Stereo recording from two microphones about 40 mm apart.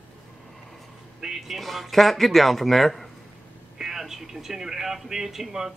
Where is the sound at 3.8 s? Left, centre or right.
Centre.